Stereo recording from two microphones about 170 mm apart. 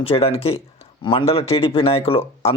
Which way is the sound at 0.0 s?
35° left (ahead or behind).